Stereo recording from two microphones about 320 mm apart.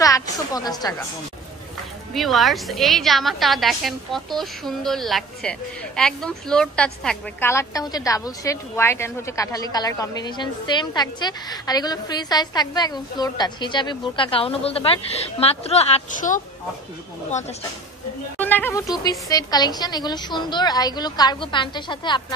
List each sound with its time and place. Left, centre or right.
0.0 s a woman's voice: centre
2.1 s a woman's voice: centre; by 17.6 s left
18.4 s a woman's voice: centre